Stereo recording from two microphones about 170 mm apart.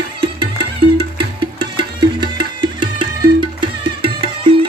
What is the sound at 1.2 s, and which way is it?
Music, 30° right (ahead or behind).